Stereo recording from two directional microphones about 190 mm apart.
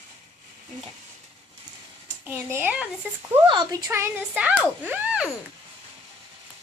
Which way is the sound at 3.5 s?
20° right (ahead or behind).